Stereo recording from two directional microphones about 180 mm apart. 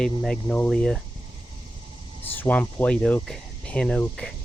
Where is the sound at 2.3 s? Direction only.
10° left (ahead or behind).